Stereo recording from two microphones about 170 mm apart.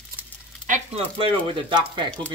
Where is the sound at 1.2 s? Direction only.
30° right (ahead or behind).